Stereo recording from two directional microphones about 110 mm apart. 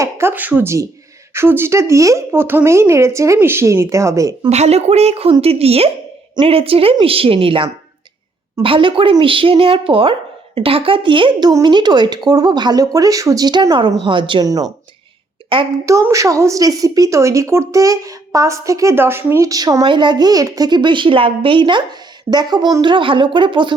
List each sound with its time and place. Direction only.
0.0 s speech: 20° right (ahead or behind)
4.4 s a woman's voice: 80° right; by 14.4 s 50° right (ahead or behind)
15.5 s a woman's voice: 55° right (ahead or behind)
15.9 s speech: 30° right (ahead or behind)
19.8 s a woman's voice: 45° right (ahead or behind)